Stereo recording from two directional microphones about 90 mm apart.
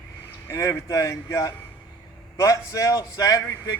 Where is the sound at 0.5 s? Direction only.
35° left (ahead or behind).